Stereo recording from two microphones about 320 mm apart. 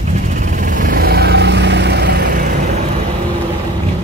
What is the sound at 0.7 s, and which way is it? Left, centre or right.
Vehicle, right.